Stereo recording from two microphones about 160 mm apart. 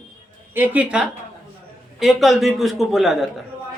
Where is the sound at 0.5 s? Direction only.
10° right (ahead or behind).